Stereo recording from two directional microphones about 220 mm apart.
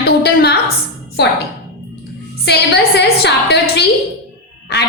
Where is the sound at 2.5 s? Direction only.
50° left (ahead or behind).